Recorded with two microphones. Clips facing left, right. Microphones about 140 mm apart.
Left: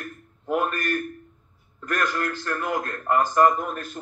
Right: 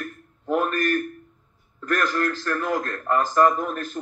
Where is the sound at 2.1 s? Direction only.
15° left (ahead or behind).